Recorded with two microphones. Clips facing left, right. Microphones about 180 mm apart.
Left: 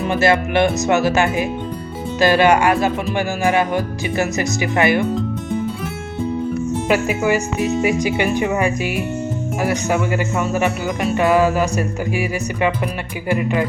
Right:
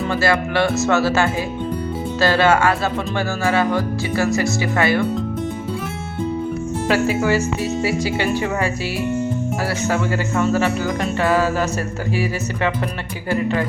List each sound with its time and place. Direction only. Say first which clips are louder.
0.1 s speech: left 4 dB; 20° left (ahead or behind)
6.8 s speech: right 1 dB; 15° left (ahead or behind)